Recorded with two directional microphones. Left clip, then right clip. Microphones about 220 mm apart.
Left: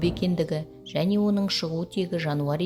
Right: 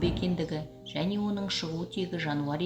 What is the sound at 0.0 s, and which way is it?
Speech, 55° left (ahead or behind).